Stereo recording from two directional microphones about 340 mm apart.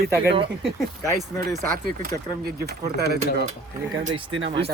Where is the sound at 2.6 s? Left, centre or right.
Right.